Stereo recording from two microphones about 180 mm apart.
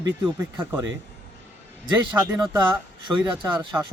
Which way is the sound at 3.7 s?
10° right (ahead or behind).